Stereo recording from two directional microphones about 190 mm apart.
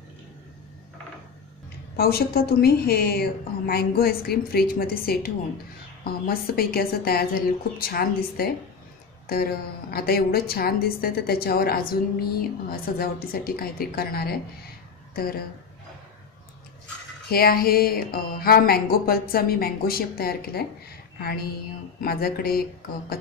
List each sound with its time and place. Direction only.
2.0 s a woman's voice: 55° left (ahead or behind)
17.3 s a woman's voice: 55° left (ahead or behind)
22.0 s a woman's voice: 50° left (ahead or behind)